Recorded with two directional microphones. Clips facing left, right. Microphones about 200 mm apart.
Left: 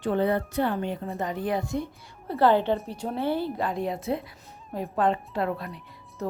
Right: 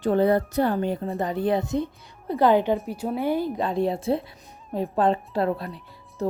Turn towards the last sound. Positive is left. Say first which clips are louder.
# right 5 dB
turn(degrees=-30)  # may be behind; listen again after turning